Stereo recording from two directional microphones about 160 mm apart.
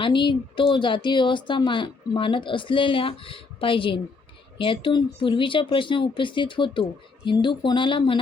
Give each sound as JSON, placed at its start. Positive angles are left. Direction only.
{"t": 0.0, "sound": "speech", "side_deg": 30}